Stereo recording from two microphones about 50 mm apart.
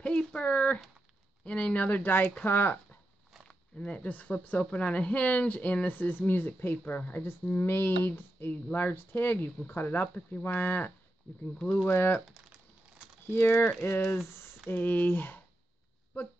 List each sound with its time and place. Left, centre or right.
0.0 s speech: centre; by 3.0 s left
3.4 s speech: left
7.5 s speech: left
11.5 s speech: left
11.9 s speech: left
13.3 s speech: left
14.7 s speech: left